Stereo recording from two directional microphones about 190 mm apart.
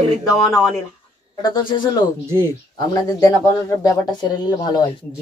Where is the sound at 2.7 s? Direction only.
20° left (ahead or behind).